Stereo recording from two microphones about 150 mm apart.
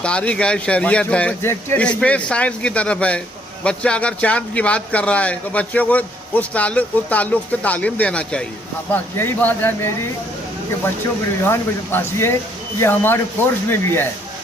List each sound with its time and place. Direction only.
0.0 s speech: 5° left (ahead or behind)
11.4 s speech: 15° left (ahead or behind)